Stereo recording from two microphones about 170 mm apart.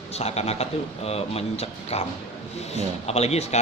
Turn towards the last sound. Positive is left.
turn(degrees=40)  # may be behind; listen again after turning